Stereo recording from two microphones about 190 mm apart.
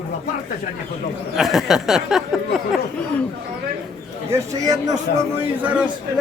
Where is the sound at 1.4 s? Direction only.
Centre (ahead or behind).